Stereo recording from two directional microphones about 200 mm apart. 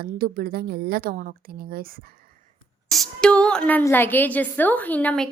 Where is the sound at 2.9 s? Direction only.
5° left (ahead or behind).